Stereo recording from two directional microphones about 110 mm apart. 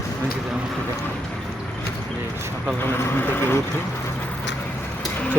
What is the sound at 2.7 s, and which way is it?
Speech, 20° left (ahead or behind).